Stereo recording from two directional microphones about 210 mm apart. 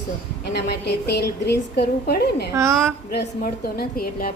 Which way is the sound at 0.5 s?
50° left (ahead or behind).